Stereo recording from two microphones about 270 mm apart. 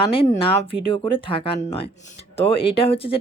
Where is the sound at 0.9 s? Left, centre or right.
Centre.